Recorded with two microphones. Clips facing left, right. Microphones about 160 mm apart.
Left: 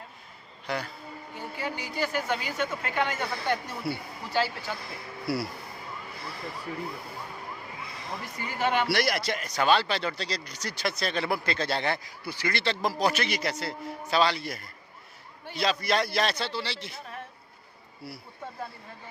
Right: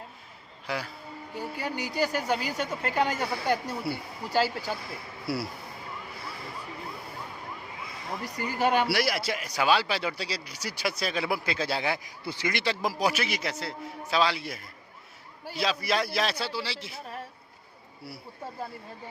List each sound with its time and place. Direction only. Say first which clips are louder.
0.7 s a man's voice: left 1 dB; 5° right (ahead or behind)
1.4 s a woman's voice: right 2 dB; 40° right (ahead or behind)
3.3 s speech: right 2 dB; 10° right (ahead or behind)
4.3 s a woman's voice: right 2 dB; 40° right (ahead or behind)
5.2 s speech: left 2 dB; centre (ahead or behind)
8.2 s a woman's voice: right 3 dB; 40° right (ahead or behind)
8.9 s speech: left 1 dB; 5° right (ahead or behind)
12.0 s a man's voice: right 1 dB; 20° right (ahead or behind); by 17.0 s 5° right (ahead or behind)